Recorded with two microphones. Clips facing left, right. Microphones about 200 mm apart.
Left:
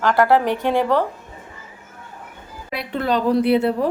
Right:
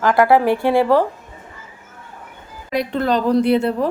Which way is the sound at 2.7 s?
45° right (ahead or behind).